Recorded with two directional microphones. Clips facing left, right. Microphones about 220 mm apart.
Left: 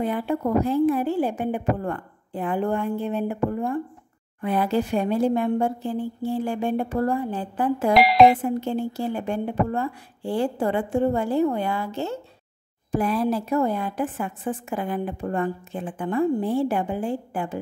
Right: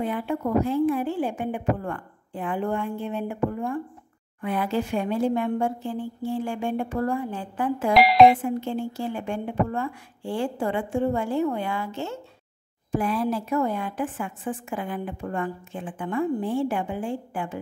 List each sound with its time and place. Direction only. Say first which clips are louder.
0.0 s a woman's voice: left 2 dB; 40° left (ahead or behind)
7.9 s speech: even; centre (ahead or behind)
8.4 s a woman's voice: left 2 dB; 40° left (ahead or behind)